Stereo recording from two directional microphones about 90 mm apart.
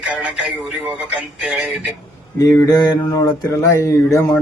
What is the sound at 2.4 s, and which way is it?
Speech, 40° left (ahead or behind).